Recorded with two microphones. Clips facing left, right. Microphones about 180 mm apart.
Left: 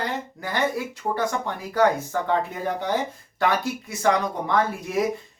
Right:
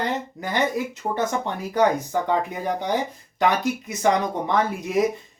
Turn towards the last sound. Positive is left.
turn(degrees=-20)  # may be behind; listen again after turning